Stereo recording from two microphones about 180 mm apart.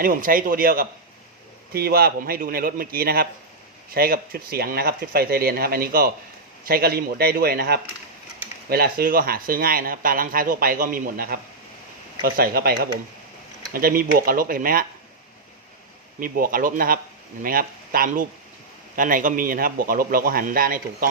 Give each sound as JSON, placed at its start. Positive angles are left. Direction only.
{"t": 0.0, "sound": "speech", "side_deg": -50}
{"t": 16.2, "sound": "speech", "side_deg": -55}